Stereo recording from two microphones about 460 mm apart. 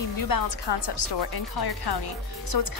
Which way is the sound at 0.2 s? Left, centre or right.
Left.